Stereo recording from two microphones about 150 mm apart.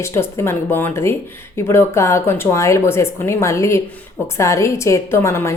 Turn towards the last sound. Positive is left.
turn(degrees=20)  # may be behind; listen again after turning